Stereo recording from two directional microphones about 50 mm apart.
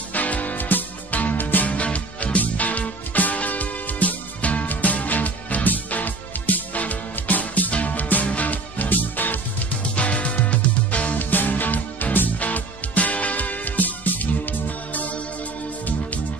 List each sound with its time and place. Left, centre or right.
0.1 s music: left
1.7 s music: left
9.9 s music: left
11.1 s music: left